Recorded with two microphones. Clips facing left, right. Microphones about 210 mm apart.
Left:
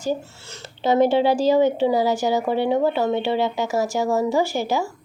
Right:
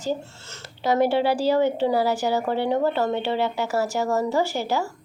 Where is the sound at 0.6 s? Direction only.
25° left (ahead or behind).